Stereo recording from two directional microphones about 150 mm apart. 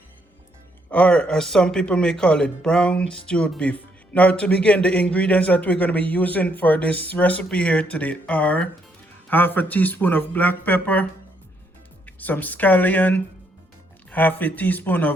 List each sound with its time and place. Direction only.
0.9 s speech: 10° left (ahead or behind)